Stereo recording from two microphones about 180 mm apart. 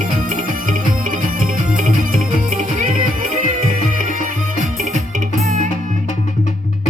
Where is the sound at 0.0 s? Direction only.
50° right (ahead or behind).